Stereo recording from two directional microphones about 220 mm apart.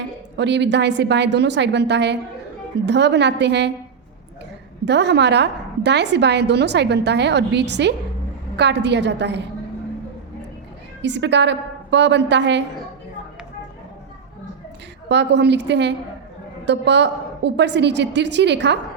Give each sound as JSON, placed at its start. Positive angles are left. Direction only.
{"t": 0.3, "sound": "a woman's voice", "side_deg": -50}
{"t": 4.9, "sound": "a woman's voice", "side_deg": -50}
{"t": 11.0, "sound": "a woman's voice", "side_deg": -55}
{"t": 15.1, "sound": "a woman's voice", "side_deg": -50}